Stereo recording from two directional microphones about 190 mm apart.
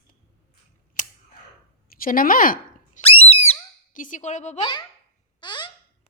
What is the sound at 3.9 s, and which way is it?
Speech, 45° left (ahead or behind).